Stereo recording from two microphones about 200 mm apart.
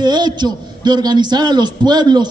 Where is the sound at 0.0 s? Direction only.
20° right (ahead or behind).